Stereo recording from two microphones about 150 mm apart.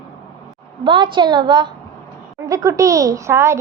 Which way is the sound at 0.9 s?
30° right (ahead or behind).